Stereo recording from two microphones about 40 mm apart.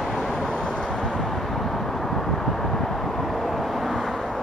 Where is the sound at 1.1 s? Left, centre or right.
Centre.